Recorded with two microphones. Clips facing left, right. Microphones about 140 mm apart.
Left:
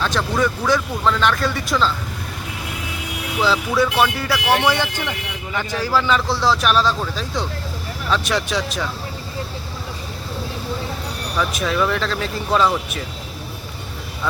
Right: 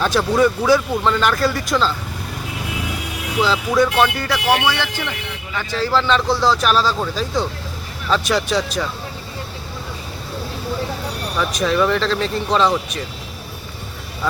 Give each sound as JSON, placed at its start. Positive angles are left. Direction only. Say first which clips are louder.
{"t": 0.0, "sound": "speech", "louder": "right 4 dB", "side_deg": -10}
{"t": 3.4, "sound": "speech", "louder": "right 1 dB", "side_deg": 0}
{"t": 11.3, "sound": "speech", "louder": "right 2 dB", "side_deg": 0}